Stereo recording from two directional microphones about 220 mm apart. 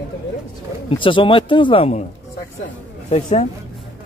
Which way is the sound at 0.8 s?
25° left (ahead or behind).